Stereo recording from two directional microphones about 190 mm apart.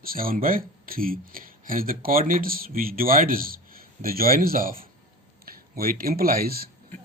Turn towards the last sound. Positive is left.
turn(degrees=-50)  # may be behind; listen again after turning